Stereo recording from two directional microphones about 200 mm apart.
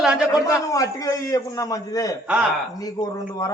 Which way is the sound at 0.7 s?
15° left (ahead or behind).